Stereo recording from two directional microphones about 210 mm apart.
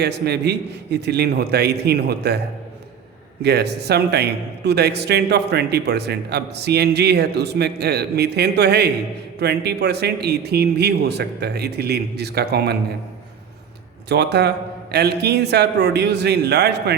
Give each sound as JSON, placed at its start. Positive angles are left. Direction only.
{"t": 0.0, "sound": "a man's voice", "side_deg": -50}
{"t": 3.4, "sound": "a man's voice", "side_deg": -50}
{"t": 14.1, "sound": "a man's voice", "side_deg": -50}